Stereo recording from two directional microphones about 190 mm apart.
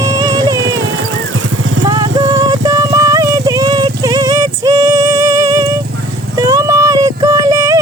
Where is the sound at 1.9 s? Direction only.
20° right (ahead or behind).